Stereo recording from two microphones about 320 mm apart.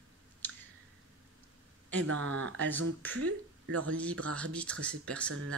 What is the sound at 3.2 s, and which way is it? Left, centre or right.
Speech, right.